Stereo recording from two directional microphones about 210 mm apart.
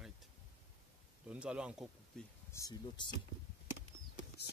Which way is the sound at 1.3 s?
5° right (ahead or behind).